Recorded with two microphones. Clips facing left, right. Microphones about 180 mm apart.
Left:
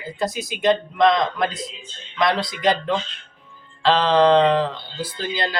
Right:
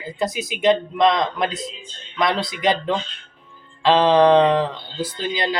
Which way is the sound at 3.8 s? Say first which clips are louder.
Right 2 dB; 15° right (ahead or behind).